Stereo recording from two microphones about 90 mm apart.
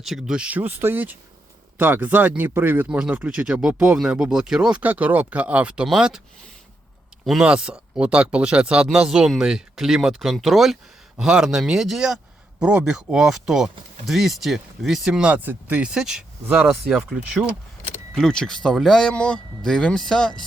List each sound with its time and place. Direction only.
0.0 s speech: 5° right (ahead or behind)
7.3 s speech: 5° right (ahead or behind)
18.1 s speech: 5° left (ahead or behind)